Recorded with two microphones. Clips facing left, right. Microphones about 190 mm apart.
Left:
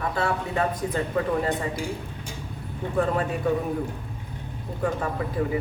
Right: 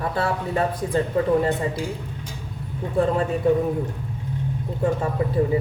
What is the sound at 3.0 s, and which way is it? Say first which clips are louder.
Speech: right 4 dB; 30° right (ahead or behind).